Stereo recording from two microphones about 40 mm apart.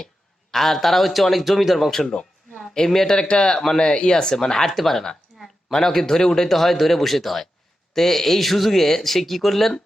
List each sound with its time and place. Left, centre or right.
0.5 s speech: centre
1.9 s speech: centre
2.5 s a sound: centre
2.7 s speech: centre
3.2 s a man's voice: left; by 9.8 s centre